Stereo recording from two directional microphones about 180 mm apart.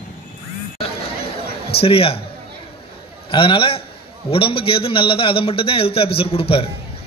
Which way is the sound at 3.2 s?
30° left (ahead or behind).